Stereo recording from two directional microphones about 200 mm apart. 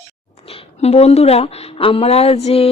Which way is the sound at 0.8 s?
30° left (ahead or behind).